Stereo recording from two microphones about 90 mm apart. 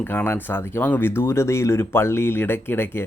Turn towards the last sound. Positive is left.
turn(degrees=25)  # may be behind; listen again after turning